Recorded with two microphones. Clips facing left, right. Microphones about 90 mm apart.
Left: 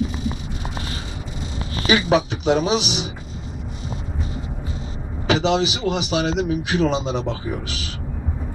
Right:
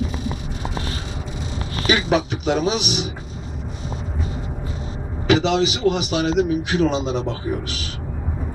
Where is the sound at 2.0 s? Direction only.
30° left (ahead or behind).